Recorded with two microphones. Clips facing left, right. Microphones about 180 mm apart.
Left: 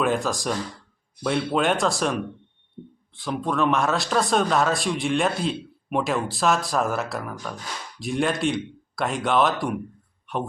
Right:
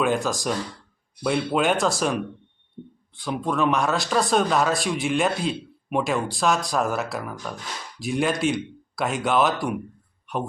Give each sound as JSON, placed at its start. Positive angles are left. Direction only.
{"t": 0.0, "sound": "a man's voice", "side_deg": 0}